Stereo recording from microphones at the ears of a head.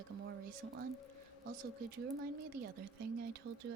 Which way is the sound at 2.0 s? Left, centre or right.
Right.